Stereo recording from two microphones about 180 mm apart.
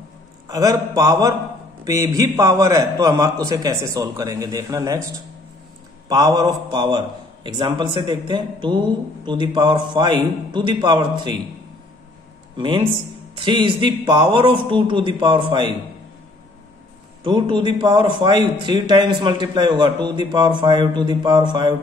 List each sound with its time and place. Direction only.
0.5 s a man's voice: 20° right (ahead or behind)
6.0 s a man's voice: 20° right (ahead or behind)
12.5 s a man's voice: 25° right (ahead or behind)
17.2 s a man's voice: 25° right (ahead or behind)